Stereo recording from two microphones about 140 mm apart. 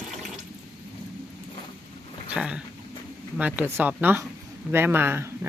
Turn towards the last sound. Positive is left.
turn(degrees=-15)  # may be behind; listen again after turning